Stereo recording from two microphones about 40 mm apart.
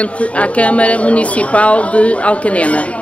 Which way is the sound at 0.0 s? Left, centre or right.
Left.